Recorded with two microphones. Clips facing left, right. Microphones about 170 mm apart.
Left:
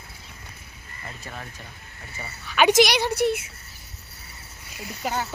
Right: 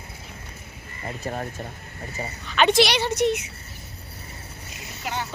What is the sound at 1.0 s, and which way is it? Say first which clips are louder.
Speech: right 9 dB; 40° right (ahead or behind).